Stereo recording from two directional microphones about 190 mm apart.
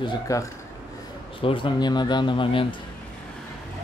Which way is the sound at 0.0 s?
20° left (ahead or behind).